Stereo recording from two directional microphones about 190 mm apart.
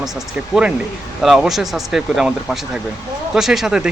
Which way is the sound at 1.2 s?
Centre (ahead or behind).